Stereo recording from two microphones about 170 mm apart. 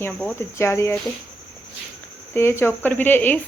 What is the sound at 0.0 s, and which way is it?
Speech, 10° left (ahead or behind).